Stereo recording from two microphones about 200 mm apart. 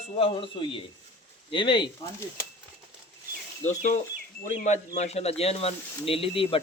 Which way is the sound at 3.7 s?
40° left (ahead or behind).